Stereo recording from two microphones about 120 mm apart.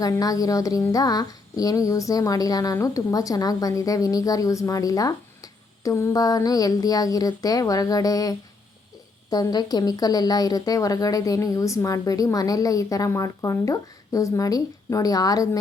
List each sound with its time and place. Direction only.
0.0 s a woman's voice: 30° left (ahead or behind)